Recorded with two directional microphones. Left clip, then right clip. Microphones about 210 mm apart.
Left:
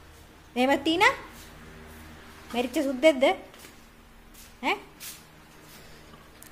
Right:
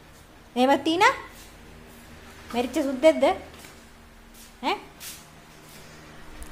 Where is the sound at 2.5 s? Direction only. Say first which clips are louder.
Right 2 dB; 5° left (ahead or behind).